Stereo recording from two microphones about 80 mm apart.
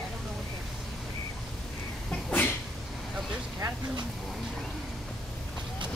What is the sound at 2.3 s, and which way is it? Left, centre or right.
Sneeze, left.